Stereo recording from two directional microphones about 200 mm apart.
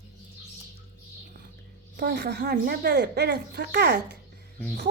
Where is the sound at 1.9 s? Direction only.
55° right (ahead or behind).